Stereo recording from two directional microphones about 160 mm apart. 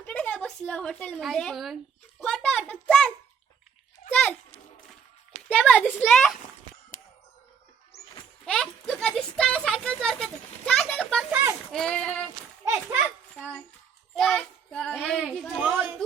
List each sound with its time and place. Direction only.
0.0 s speech: 5° left (ahead or behind)
2.2 s a sound: 5° left (ahead or behind)
4.1 s a sound: 10° left (ahead or behind)
5.5 s a child's voice: 5° left (ahead or behind)
6.9 s a sound: 55° left (ahead or behind)
8.4 s speech: 5° left (ahead or behind)
11.3 s speech: 10° right (ahead or behind)
11.7 s speech: 5° left (ahead or behind)
12.6 s a child's voice: 15° right (ahead or behind)
13.3 s a child's voice: 5° left (ahead or behind)